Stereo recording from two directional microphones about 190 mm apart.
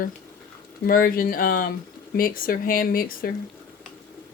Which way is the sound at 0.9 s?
50° left (ahead or behind).